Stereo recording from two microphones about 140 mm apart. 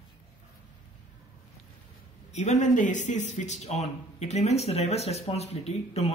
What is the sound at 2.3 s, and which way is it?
Speech, 55° left (ahead or behind).